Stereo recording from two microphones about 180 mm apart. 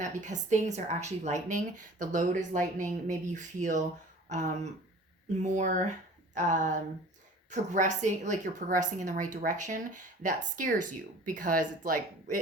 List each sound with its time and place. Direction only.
0.0 s speech: 40° right (ahead or behind)